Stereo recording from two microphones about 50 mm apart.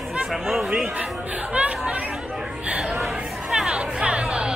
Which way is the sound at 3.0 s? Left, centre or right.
Centre.